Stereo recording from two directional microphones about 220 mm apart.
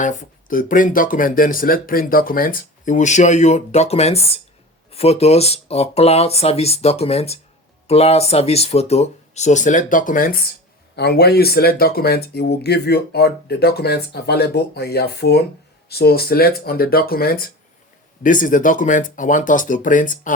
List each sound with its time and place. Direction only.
0.0 s speech: 35° left (ahead or behind)